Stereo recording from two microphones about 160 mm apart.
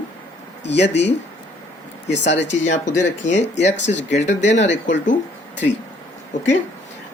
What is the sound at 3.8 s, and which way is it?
Speech, 90° left.